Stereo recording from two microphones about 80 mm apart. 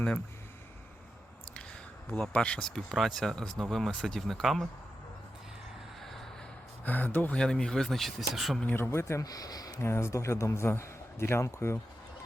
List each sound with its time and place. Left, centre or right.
2.0 s speech: centre
6.0 s vehicle: centre
6.8 s speech: left
7.3 s speech: centre
8.6 s a man's voice: left
9.2 s speech: left
9.7 s a man's voice: left